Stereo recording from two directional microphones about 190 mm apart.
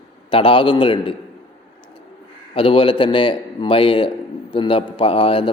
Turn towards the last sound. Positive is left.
turn(degrees=25)  # may be behind; listen again after turning